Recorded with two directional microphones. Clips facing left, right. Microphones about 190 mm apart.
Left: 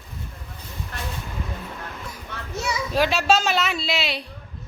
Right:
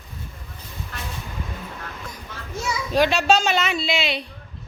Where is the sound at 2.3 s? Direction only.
60° left (ahead or behind).